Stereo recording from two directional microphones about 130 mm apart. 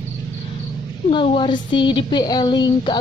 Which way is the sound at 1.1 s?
40° left (ahead or behind).